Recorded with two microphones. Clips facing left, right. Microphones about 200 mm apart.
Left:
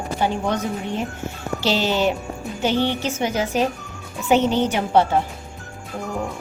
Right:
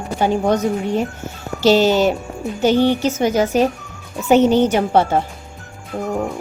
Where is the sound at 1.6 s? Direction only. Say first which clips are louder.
Right 8 dB; 45° right (ahead or behind).